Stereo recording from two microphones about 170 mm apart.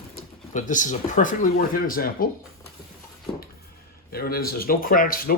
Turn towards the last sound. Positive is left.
turn(degrees=60)  # may be behind; listen again after turning